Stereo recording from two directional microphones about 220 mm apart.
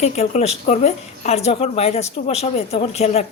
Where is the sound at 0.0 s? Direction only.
30° left (ahead or behind).